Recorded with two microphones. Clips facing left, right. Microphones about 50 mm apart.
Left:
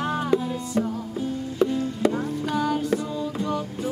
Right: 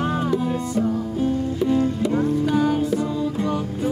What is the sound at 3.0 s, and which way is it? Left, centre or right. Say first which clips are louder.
Music: right 4 dB; right.